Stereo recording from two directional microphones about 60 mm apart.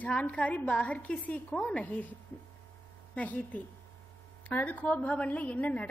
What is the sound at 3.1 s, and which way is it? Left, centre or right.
A woman's voice, left.